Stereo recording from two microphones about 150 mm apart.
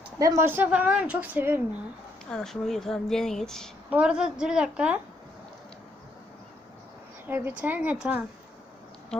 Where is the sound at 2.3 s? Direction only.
Centre (ahead or behind).